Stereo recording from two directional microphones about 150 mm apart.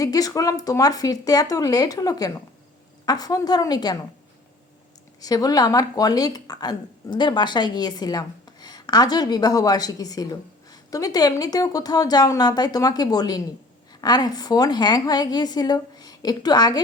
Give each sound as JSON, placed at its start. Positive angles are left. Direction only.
{"t": 0.0, "sound": "speech", "side_deg": 25}
{"t": 5.2, "sound": "speech", "side_deg": 25}